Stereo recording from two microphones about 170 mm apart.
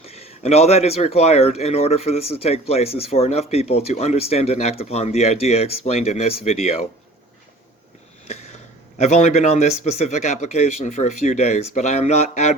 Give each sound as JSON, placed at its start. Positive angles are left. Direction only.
{"t": 0.0, "sound": "speech", "side_deg": 35}
{"t": 9.0, "sound": "speech", "side_deg": 40}